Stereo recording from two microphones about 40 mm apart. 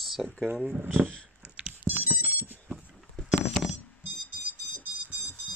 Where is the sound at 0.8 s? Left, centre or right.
Right.